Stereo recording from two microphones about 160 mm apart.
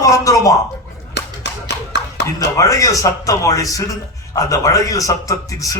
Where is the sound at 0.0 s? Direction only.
20° left (ahead or behind).